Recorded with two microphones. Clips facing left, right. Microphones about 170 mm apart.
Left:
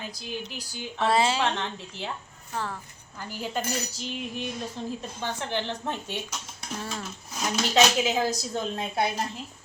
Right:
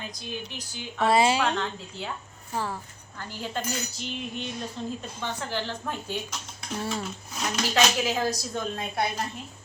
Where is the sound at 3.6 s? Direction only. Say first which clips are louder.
Left 1 dB; 35° left (ahead or behind).